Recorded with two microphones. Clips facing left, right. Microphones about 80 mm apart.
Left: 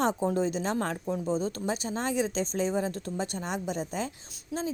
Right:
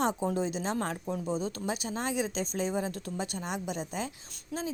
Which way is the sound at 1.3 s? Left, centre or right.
Left.